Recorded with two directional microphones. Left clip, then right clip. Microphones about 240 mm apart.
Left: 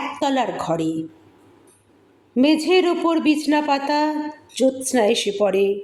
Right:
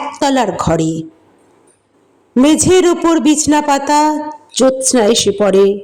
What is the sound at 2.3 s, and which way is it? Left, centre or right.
A man's voice, right.